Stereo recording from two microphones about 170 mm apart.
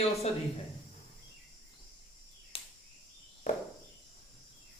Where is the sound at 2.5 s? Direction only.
35° left (ahead or behind).